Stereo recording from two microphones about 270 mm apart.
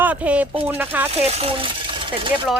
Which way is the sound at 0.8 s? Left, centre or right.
Centre.